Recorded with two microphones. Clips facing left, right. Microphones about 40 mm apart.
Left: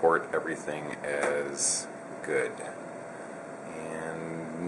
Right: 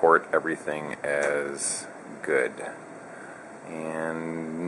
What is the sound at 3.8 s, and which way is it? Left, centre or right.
Speech, centre.